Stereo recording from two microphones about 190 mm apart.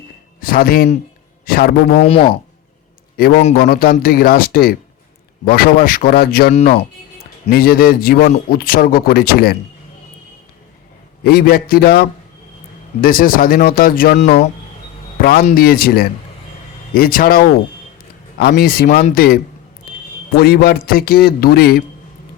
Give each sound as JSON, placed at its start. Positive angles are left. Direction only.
{"t": 0.4, "sound": "a man's voice", "side_deg": 50}
{"t": 3.2, "sound": "a man's voice", "side_deg": 55}
{"t": 7.5, "sound": "a man's voice", "side_deg": 50}
{"t": 11.2, "sound": "a man's voice", "side_deg": 55}